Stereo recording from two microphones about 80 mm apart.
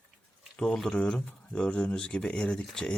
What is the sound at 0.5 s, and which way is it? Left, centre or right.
Speech, centre.